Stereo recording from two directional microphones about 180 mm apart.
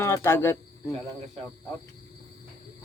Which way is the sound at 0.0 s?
15° left (ahead or behind).